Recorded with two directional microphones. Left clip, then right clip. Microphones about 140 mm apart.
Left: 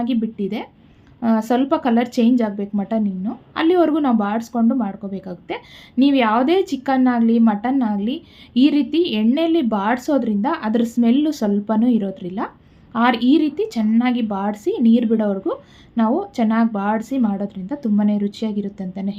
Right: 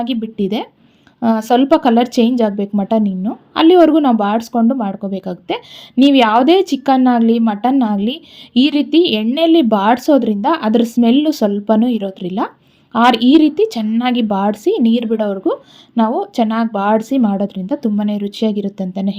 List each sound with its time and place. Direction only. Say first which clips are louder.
0.0 s a woman's voice: right 3 dB; 35° right (ahead or behind)